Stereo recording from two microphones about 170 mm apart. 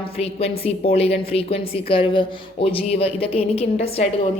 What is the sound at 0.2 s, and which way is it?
A woman's voice, 35° left (ahead or behind).